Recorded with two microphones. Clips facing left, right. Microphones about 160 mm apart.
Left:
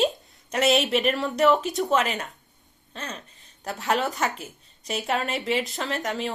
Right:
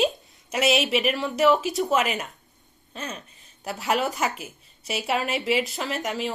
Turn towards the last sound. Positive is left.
turn(degrees=0)  # may be behind; listen again after turning